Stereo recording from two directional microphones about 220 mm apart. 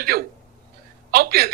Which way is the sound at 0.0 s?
45° right (ahead or behind).